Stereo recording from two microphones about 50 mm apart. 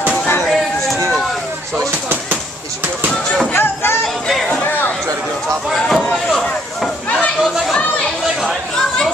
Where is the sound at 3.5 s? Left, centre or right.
Left.